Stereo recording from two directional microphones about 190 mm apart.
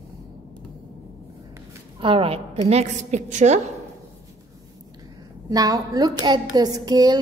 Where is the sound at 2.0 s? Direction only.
30° right (ahead or behind).